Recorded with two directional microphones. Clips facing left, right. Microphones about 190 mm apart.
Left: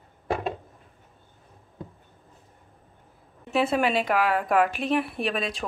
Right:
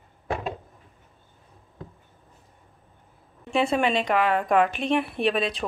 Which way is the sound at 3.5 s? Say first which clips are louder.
Right 1 dB; 5° left (ahead or behind).